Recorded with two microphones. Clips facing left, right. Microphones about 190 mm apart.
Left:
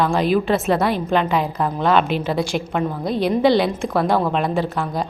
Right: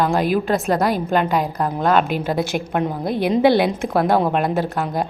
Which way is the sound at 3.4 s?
55° right (ahead or behind).